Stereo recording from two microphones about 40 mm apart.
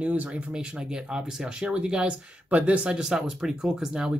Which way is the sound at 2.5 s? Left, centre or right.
Right.